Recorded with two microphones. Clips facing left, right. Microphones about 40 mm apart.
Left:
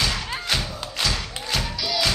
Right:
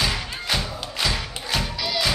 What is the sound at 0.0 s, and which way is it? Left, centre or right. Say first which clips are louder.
Music: even; centre.